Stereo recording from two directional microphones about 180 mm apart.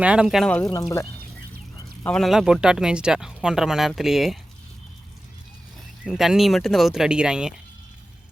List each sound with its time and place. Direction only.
0.0 s speech: 5° right (ahead or behind)
0.5 s speech: 20° left (ahead or behind)
2.0 s speech: centre (ahead or behind)
6.1 s speech: centre (ahead or behind)